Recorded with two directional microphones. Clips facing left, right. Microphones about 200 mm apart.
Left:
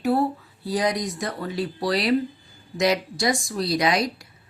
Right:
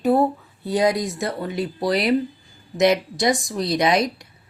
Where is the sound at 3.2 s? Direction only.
20° right (ahead or behind).